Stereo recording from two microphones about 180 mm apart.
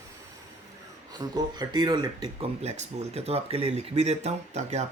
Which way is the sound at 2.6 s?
35° right (ahead or behind).